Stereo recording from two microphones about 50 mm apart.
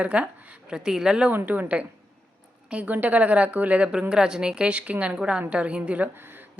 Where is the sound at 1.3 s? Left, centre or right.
Right.